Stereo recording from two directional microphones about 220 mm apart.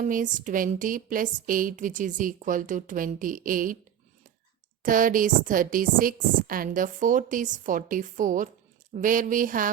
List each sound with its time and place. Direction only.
0.0 s speech: 35° right (ahead or behind)
4.8 s speech: 40° right (ahead or behind)